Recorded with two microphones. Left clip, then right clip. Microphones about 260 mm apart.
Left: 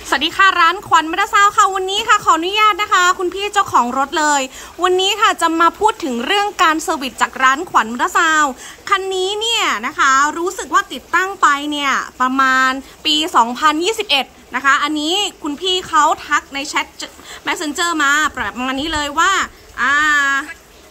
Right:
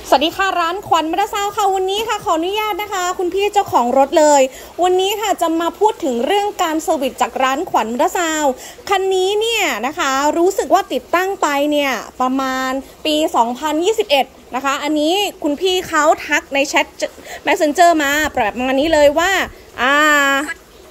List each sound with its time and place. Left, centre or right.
0.1 s a woman's voice: centre
5.4 s speech: left
6.8 s a woman's voice: centre
13.3 s speech: left
13.6 s a woman's voice: centre
18.3 s speech: left
18.7 s a woman's voice: centre